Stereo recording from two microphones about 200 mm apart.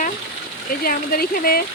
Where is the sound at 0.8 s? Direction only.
50° left (ahead or behind).